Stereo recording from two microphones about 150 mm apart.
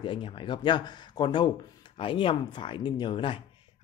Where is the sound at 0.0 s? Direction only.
35° left (ahead or behind).